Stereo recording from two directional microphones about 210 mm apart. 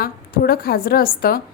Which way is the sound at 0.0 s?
45° left (ahead or behind).